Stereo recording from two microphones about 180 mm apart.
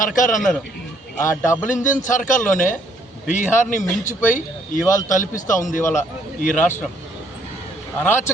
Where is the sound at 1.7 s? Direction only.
45° left (ahead or behind).